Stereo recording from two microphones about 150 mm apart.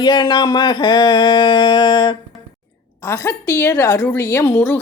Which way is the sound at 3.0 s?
15° left (ahead or behind).